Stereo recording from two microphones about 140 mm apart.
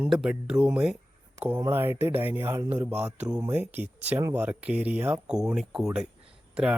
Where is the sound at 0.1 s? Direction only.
5° right (ahead or behind).